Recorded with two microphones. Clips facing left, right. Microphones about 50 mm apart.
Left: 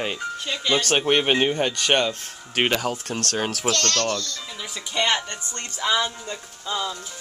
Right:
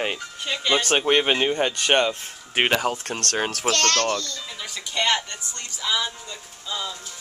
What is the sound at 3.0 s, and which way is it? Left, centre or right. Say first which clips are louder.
Speech: left 1 dB; right.